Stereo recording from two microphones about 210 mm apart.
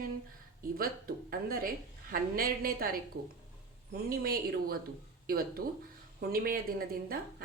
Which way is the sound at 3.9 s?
45° right (ahead or behind).